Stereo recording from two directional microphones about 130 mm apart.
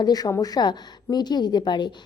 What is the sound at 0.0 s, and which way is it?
A woman's voice, 30° left (ahead or behind).